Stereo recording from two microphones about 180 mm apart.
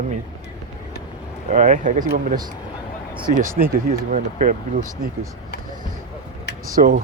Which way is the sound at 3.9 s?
45° right (ahead or behind).